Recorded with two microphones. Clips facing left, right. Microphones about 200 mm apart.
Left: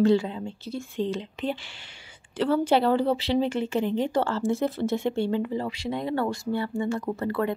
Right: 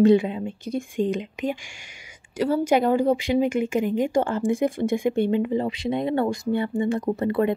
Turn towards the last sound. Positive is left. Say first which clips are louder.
# right 5 dB
turn(degrees=-20)  # may be behind; listen again after turning